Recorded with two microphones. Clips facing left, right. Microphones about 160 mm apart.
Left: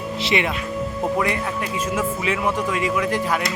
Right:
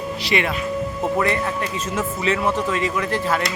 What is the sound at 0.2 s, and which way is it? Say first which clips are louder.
Speech: left 1 dB; 20° left (ahead or behind).